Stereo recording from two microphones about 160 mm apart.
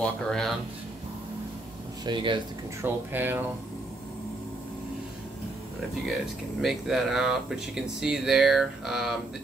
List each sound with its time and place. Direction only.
0.0 s speech: 5° left (ahead or behind)
2.0 s speech: 30° right (ahead or behind)
2.8 s speech: 15° right (ahead or behind)
6.6 s speech: centre (ahead or behind)